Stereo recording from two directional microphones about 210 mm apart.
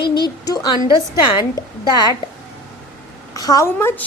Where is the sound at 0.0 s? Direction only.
20° left (ahead or behind).